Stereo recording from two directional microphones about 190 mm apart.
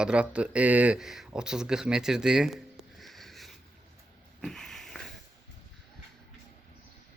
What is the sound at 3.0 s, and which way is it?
Sniff, centre (ahead or behind).